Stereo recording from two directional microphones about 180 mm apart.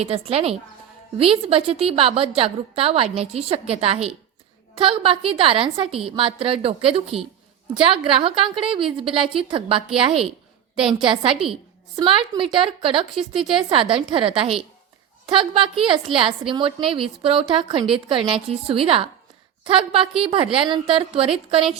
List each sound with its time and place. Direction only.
0.0 s a woman's voice: 35° right (ahead or behind)
11.0 s a woman's voice: 30° right (ahead or behind)